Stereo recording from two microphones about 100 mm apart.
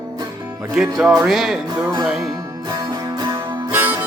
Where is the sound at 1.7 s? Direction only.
40° right (ahead or behind).